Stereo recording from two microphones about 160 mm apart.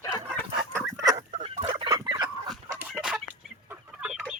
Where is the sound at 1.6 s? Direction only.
25° right (ahead or behind).